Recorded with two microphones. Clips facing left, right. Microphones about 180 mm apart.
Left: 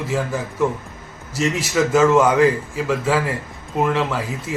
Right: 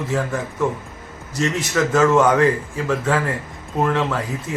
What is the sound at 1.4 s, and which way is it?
Speech, 5° left (ahead or behind).